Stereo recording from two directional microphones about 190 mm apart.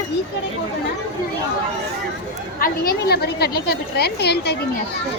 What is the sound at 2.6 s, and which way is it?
A woman's voice, 50° left (ahead or behind).